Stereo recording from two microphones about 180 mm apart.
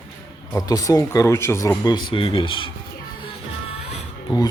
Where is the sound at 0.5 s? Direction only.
20° left (ahead or behind).